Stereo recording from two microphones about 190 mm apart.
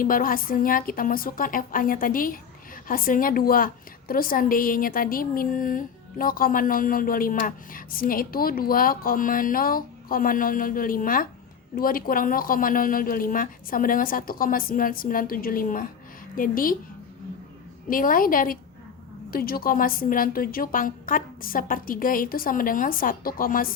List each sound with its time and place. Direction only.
0.0 s a woman's voice: 50° left (ahead or behind)
17.8 s a woman's voice: 45° left (ahead or behind)